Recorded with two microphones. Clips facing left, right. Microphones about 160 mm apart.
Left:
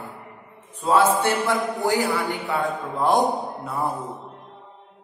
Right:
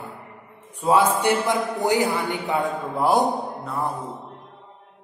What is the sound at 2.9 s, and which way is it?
Speech, 10° right (ahead or behind).